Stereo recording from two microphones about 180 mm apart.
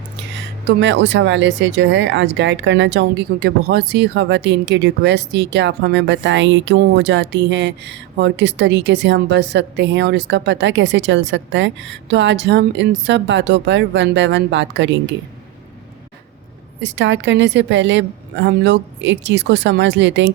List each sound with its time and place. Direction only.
0.3 s speech: 80° right
16.8 s speech: 90° right